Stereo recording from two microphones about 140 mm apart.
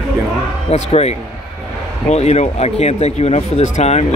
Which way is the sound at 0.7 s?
50° left (ahead or behind).